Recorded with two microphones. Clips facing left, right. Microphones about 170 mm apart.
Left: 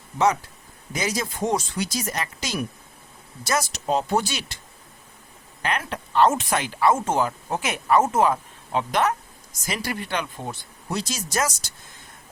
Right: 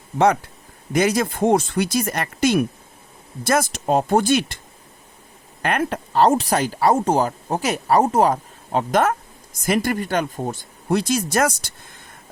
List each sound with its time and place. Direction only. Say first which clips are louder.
0.9 s speech: right 8 dB; 55° right (ahead or behind)
5.6 s speech: right 6 dB; 50° right (ahead or behind)